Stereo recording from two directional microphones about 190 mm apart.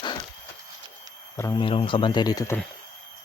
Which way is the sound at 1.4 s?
20° left (ahead or behind).